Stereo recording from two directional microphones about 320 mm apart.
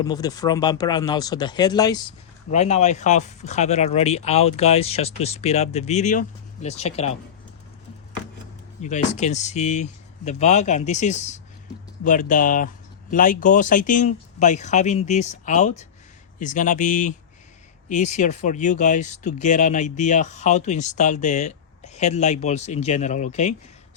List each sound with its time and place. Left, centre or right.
0.0 s speech: centre
8.8 s speech: left